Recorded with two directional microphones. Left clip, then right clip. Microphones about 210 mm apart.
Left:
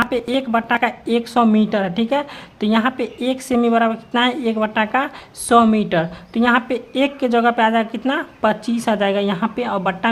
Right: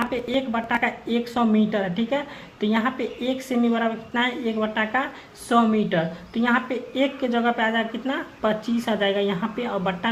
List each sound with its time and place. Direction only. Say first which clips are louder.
0.1 s speech: left 6 dB; 40° left (ahead or behind)